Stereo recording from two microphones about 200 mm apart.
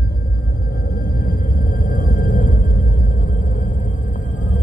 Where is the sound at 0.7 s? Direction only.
45° left (ahead or behind).